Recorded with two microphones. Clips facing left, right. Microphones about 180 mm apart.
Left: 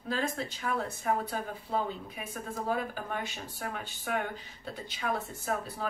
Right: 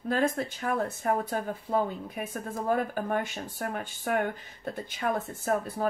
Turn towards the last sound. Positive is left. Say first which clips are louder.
# right 6 dB
turn(degrees=-50)  # may be behind; listen again after turning